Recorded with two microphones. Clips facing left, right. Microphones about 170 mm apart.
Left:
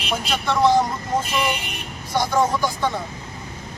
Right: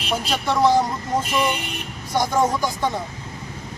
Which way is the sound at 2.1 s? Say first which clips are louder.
Even; 15° right (ahead or behind).